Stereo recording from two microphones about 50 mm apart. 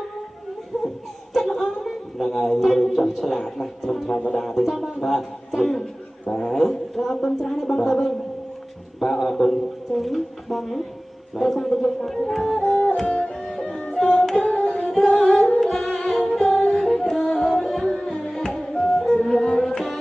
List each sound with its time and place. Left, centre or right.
0.7 s laughter: centre
1.3 s a sound: centre
4.3 s speech: centre
12.6 s music: left
13.4 s music: centre
14.4 s music: centre
14.8 s music: centre